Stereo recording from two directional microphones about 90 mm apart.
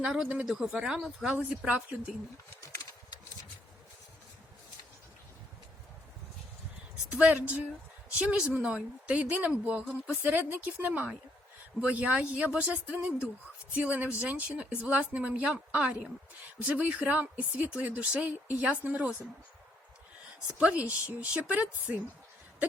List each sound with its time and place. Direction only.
0.0 s speech: 10° right (ahead or behind)
7.2 s speech: 15° right (ahead or behind)
20.6 s speech: 15° right (ahead or behind)